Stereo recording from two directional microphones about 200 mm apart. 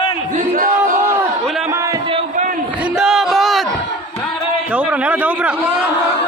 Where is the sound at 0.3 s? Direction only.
40° right (ahead or behind).